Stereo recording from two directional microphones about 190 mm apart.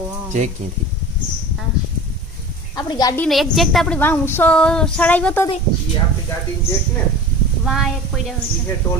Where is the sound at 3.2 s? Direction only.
Centre (ahead or behind).